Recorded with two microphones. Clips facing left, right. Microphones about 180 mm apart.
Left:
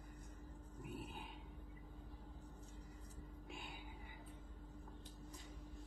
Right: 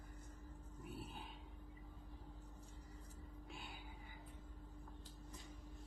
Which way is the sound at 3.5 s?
15° left (ahead or behind).